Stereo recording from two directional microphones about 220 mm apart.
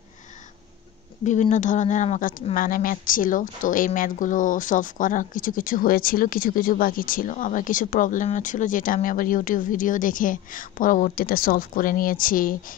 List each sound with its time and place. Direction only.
1.2 s speech: 35° left (ahead or behind)